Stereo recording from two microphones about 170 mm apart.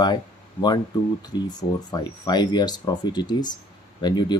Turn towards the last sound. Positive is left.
turn(degrees=25)  # may be behind; listen again after turning